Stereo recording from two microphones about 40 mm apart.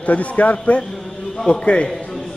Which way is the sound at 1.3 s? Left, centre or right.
Centre.